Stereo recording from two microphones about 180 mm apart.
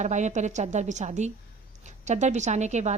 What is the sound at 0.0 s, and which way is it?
A woman's voice, 40° right (ahead or behind).